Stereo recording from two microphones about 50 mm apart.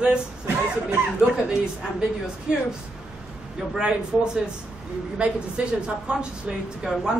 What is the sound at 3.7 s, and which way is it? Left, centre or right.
A man's voice, centre.